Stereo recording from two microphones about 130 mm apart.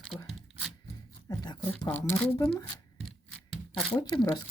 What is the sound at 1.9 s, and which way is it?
Speech, 15° left (ahead or behind).